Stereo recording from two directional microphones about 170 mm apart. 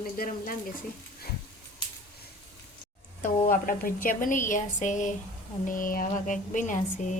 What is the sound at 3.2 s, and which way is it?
A woman's voice, 55° left (ahead or behind).